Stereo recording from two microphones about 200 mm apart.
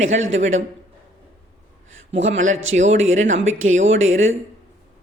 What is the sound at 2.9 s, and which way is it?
A man's voice, 75° right (ahead or behind).